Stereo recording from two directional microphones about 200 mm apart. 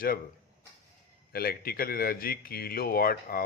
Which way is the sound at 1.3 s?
50° left (ahead or behind).